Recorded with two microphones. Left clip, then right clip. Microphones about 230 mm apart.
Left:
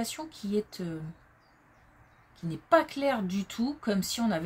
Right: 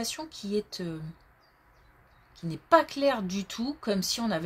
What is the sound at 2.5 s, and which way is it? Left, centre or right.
Speech, right.